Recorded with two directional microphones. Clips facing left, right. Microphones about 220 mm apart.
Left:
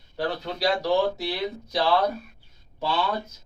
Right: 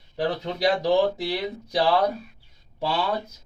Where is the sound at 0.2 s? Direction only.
15° right (ahead or behind).